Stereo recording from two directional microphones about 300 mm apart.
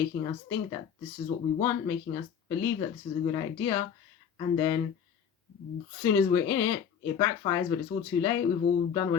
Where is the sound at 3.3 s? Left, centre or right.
Centre.